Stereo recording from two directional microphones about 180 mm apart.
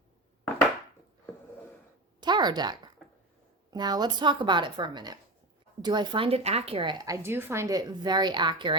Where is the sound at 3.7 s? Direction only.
20° right (ahead or behind).